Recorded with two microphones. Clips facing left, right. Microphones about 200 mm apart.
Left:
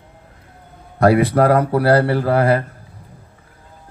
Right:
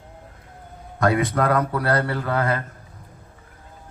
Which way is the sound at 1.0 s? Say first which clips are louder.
Left 7 dB; 35° left (ahead or behind).